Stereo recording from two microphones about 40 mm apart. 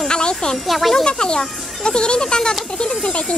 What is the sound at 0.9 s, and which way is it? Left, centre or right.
Speech, left.